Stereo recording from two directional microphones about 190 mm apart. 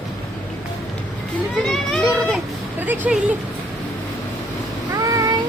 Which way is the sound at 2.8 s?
10° right (ahead or behind).